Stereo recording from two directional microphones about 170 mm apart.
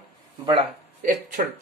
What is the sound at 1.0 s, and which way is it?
Speech, 50° right (ahead or behind).